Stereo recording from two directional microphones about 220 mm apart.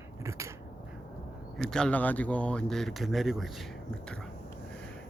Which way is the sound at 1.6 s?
5° left (ahead or behind).